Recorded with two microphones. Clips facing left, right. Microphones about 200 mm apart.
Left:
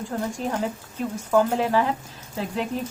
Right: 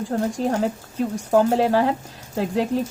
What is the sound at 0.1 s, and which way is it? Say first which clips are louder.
Speech: right 5 dB; 40° right (ahead or behind).